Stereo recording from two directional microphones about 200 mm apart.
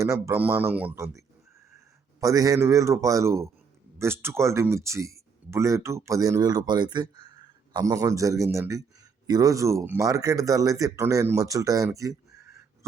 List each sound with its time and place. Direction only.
0.0 s speech: 15° right (ahead or behind)
2.2 s speech: 15° right (ahead or behind)